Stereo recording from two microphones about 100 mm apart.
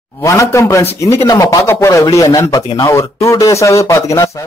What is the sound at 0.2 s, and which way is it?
A man's voice, 30° left (ahead or behind).